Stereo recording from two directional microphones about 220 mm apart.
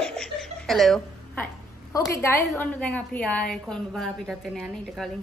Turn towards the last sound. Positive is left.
turn(degrees=0)  # may be behind; listen again after turning